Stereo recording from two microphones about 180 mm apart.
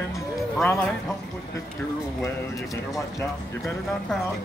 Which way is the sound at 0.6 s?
10° left (ahead or behind).